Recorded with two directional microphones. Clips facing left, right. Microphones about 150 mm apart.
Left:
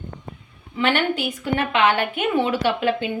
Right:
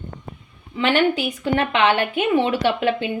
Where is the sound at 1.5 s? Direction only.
25° right (ahead or behind).